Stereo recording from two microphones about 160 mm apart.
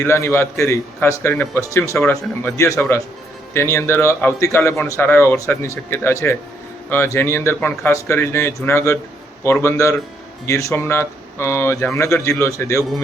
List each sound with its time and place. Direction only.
0.0 s a man's voice: 15° left (ahead or behind)